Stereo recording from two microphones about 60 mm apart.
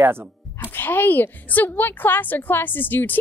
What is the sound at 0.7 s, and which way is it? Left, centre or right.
A woman's voice, left.